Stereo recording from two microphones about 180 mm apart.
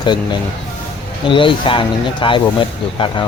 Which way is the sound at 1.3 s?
30° left (ahead or behind).